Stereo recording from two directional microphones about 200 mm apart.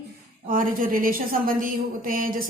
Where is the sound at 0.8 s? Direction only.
45° right (ahead or behind).